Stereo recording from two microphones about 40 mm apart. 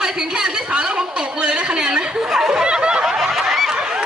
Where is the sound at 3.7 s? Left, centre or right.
Centre.